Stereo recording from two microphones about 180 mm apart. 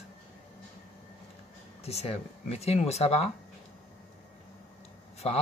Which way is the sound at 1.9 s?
35° left (ahead or behind).